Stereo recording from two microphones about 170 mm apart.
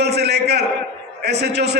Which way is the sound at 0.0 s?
75° right (ahead or behind).